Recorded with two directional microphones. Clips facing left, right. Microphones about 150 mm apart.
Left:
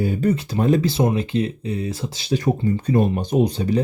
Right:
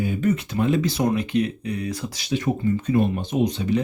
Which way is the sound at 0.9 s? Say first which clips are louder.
Left 1 dB; 25° left (ahead or behind).